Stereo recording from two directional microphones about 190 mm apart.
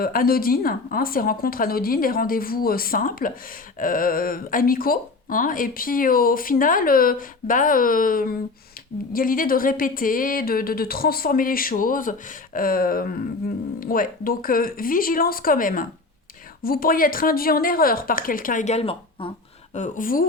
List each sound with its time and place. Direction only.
0.0 s speech: 50° left (ahead or behind); by 19.3 s 30° left (ahead or behind)
19.7 s speech: 40° left (ahead or behind)